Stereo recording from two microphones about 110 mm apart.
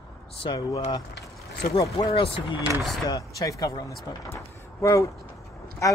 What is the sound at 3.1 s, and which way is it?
Speech, 35° left (ahead or behind).